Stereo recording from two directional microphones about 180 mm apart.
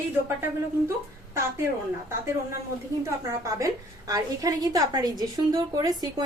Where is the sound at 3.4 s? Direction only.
20° right (ahead or behind).